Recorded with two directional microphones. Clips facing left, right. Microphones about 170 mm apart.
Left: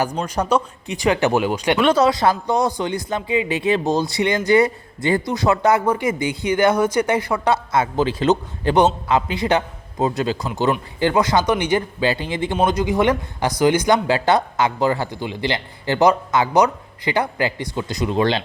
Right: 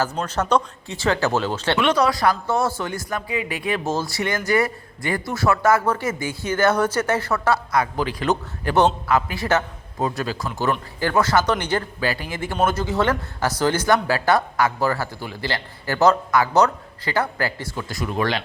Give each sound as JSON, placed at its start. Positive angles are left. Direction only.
{"t": 0.2, "sound": "speech", "side_deg": 10}
{"t": 1.8, "sound": "speech", "side_deg": 30}